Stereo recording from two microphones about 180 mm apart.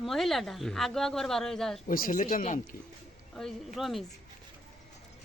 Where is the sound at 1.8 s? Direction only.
50° left (ahead or behind).